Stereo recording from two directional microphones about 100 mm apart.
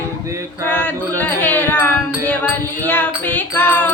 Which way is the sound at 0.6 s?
20° left (ahead or behind).